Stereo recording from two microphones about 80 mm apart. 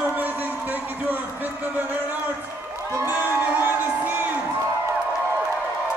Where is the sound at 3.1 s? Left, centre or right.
Right.